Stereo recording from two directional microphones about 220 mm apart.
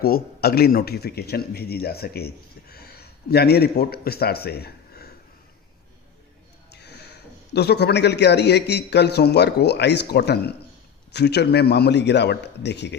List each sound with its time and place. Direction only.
0.0 s a man's voice: 45° left (ahead or behind)
6.7 s a sound: 50° left (ahead or behind)
7.5 s a man's voice: 50° left (ahead or behind)